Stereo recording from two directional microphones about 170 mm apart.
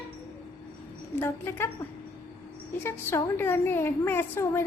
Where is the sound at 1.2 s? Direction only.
15° left (ahead or behind).